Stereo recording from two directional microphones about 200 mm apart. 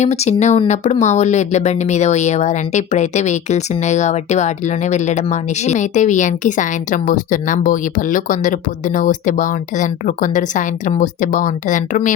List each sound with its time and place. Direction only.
0.0 s speech: 35° left (ahead or behind)